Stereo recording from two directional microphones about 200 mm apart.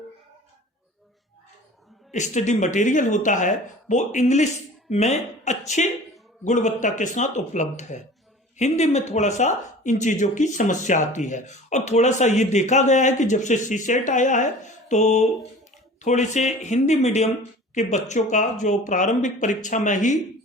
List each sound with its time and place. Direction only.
2.1 s speech: 35° left (ahead or behind)